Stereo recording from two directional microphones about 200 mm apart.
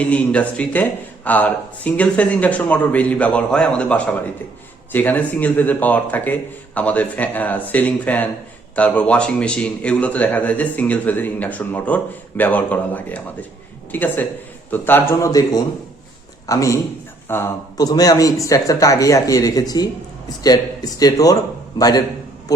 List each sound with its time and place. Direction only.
0.0 s a man's voice: 5° left (ahead or behind)